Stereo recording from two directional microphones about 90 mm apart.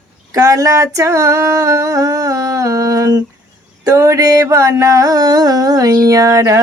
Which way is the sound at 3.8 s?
35° right (ahead or behind).